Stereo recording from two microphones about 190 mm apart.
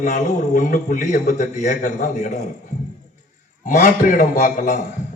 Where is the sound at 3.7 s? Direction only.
45° left (ahead or behind).